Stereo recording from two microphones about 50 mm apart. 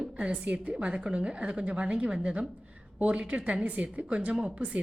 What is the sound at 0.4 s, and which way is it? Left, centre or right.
A woman's voice, right.